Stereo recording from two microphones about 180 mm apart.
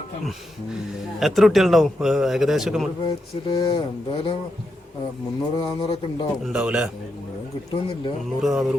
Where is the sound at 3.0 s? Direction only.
30° left (ahead or behind).